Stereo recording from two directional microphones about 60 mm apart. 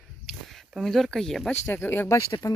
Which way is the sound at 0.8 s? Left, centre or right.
Centre.